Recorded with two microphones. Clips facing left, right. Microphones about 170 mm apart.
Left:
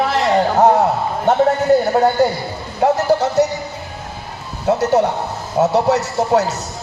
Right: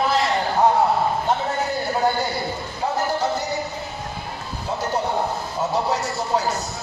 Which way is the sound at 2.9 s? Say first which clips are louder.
Left 6 dB; 70° left (ahead or behind).